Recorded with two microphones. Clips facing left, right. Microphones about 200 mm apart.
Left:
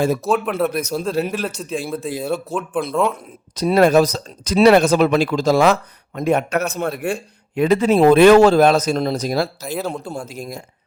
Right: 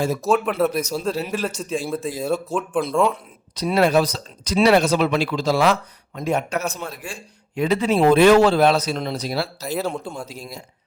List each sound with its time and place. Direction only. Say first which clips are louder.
0.3 s speech: even; centre (ahead or behind)
0.7 s speech: left 2 dB; 55° left (ahead or behind)
1.3 s speech: even; centre (ahead or behind)
3.5 s speech: left 4 dB; 45° left (ahead or behind)
6.1 s speech: left 5 dB; 60° left (ahead or behind)
9.6 s speech: even; centre (ahead or behind)
10.2 s speech: left 5 dB; 50° left (ahead or behind)